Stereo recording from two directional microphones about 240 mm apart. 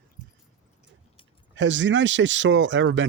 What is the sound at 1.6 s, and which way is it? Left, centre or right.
Speech, right.